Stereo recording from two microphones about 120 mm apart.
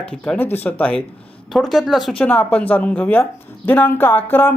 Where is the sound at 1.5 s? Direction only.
Centre (ahead or behind).